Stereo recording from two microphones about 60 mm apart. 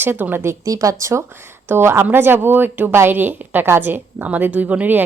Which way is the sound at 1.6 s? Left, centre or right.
Right.